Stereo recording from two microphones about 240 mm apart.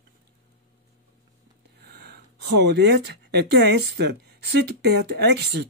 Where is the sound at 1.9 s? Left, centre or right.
Right.